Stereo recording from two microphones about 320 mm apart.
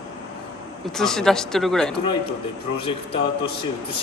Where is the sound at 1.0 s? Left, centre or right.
Centre.